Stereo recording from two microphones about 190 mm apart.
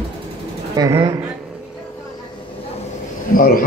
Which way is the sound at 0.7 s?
20° right (ahead or behind).